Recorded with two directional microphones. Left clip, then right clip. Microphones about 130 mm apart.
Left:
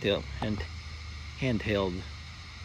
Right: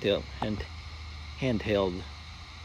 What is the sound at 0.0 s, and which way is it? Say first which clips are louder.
Speech: right 1 dB; 20° right (ahead or behind).